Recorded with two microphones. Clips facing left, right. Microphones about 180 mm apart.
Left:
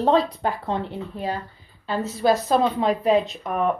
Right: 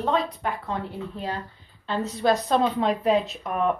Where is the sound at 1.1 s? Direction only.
15° left (ahead or behind).